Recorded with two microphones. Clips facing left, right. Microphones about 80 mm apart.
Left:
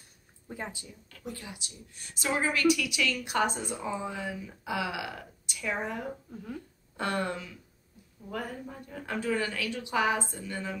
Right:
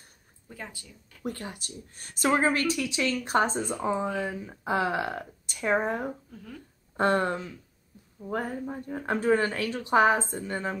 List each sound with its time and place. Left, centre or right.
0.5 s speech: left
1.2 s speech: right
6.3 s speech: centre
7.0 s speech: right